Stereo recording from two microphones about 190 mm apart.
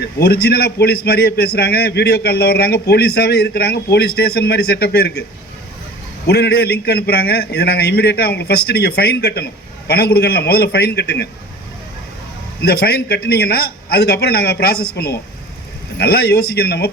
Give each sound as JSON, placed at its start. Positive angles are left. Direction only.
{"t": 0.0, "sound": "a man's voice", "side_deg": 55}
{"t": 6.2, "sound": "a man's voice", "side_deg": 60}
{"t": 12.6, "sound": "a man's voice", "side_deg": 55}